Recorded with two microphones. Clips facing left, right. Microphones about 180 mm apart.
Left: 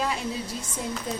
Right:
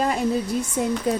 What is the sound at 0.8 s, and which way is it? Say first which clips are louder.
Speech: right 8 dB; 60° right (ahead or behind).